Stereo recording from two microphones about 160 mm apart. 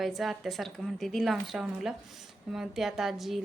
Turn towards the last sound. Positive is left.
turn(degrees=0)  # may be behind; listen again after turning